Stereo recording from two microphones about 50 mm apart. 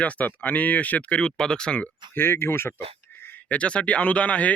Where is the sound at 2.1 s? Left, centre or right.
Left.